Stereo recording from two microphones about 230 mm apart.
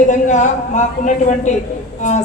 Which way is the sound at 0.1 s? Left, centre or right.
Left.